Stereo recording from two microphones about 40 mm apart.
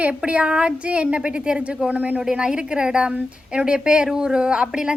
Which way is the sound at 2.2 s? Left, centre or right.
Centre.